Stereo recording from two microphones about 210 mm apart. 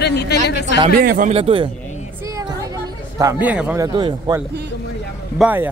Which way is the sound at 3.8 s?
20° right (ahead or behind).